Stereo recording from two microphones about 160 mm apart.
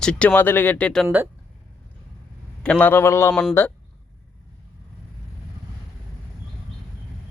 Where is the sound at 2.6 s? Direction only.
5° left (ahead or behind).